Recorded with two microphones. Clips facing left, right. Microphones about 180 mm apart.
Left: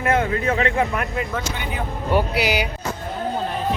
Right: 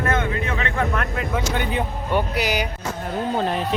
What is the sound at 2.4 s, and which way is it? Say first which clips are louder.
Speech: left 2 dB; 45° right (ahead or behind).